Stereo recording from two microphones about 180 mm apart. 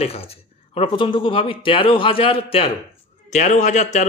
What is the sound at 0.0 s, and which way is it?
Speech, 35° left (ahead or behind).